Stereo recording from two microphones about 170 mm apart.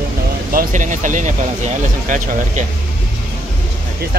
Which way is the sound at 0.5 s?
50° right (ahead or behind).